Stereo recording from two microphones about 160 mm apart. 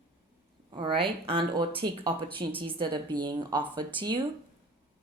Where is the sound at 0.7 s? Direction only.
30° right (ahead or behind).